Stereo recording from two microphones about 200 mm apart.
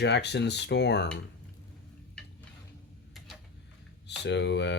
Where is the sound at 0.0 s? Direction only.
60° left (ahead or behind).